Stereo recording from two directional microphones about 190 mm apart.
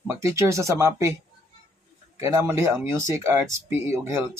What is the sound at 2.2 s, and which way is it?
Speech, 15° right (ahead or behind).